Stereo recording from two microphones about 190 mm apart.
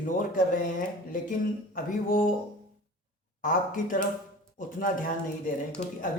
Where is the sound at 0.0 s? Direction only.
45° left (ahead or behind).